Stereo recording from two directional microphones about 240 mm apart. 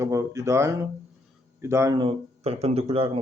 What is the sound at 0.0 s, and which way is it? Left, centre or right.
Speech, centre.